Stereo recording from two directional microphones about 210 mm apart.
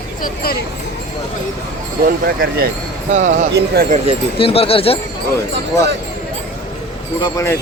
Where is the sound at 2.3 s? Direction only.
45° right (ahead or behind).